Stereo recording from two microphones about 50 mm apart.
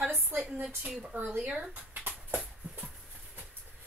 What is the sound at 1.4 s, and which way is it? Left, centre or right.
Speech, centre.